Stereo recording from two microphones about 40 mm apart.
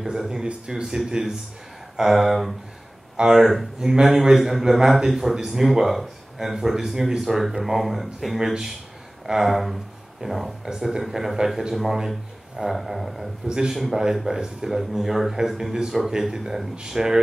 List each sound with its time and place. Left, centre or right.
0.0 s a man's voice: centre
13.5 s a man's voice: centre
13.7 s a man's voice: centre